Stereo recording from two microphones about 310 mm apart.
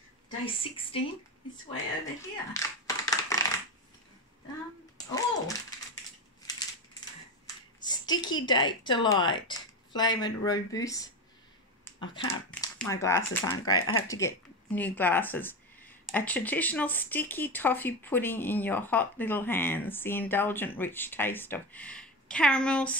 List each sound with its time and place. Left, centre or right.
0.6 s speech: centre
2.5 s a sound: centre
4.9 s a child's voice: centre
7.8 s speech: centre
11.8 s a sound: centre
12.4 s speech: centre
13.7 s speech: left
14.0 s speech: centre